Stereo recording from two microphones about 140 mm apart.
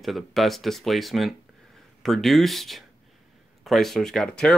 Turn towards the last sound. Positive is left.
turn(degrees=5)  # may be behind; listen again after turning